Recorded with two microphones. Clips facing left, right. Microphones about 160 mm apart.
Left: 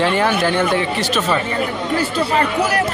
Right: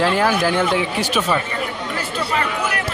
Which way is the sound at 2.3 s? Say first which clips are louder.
Left 5 dB; 35° left (ahead or behind).